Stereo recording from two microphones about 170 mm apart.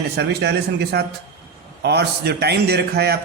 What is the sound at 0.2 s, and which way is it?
A man's voice, 80° right.